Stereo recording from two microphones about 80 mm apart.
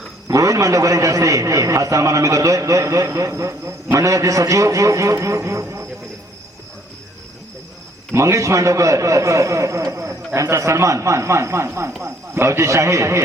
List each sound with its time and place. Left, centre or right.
0.3 s a man's voice: right
8.1 s a man's voice: right